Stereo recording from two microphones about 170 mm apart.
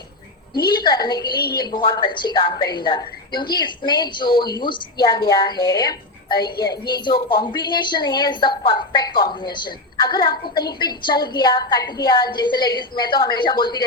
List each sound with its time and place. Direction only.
0.7 s a woman's voice: 25° left (ahead or behind)